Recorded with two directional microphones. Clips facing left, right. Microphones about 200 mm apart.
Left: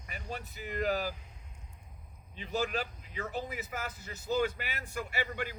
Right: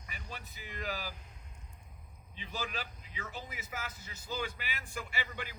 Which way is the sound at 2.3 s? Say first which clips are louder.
Left 7 dB; 45° left (ahead or behind).